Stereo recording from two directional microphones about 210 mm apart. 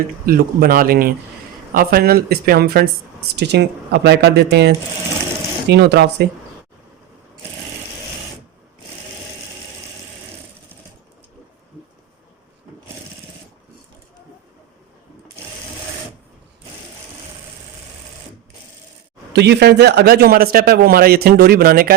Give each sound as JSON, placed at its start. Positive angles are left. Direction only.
{"t": 0.3, "sound": "a man's voice", "side_deg": -45}
{"t": 19.3, "sound": "a man's voice", "side_deg": -55}